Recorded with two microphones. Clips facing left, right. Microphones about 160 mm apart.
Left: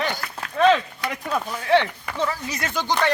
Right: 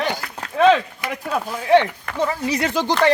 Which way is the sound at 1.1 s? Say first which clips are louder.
Right 3 dB; 5° right (ahead or behind).